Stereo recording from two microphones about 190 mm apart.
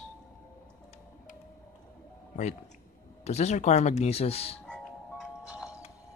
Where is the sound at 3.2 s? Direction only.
35° left (ahead or behind).